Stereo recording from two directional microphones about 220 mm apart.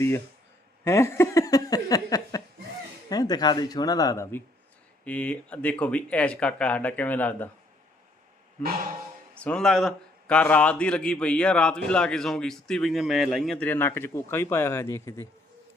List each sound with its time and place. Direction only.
0.9 s speech: 10° left (ahead or behind)
9.4 s a man's voice: 5° left (ahead or behind)